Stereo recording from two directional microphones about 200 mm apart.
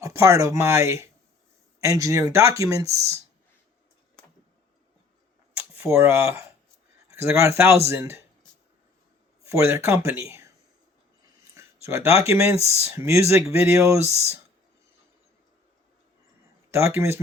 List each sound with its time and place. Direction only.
0.0 s speech: 15° right (ahead or behind)
5.7 s speech: 15° right (ahead or behind)
9.5 s speech: 15° right (ahead or behind)
11.5 s a sound: 15° right (ahead or behind)
12.3 s speech: 15° right (ahead or behind)
12.6 s speech: 30° left (ahead or behind)
12.9 s speech: 15° right (ahead or behind)
16.7 s speech: 15° right (ahead or behind)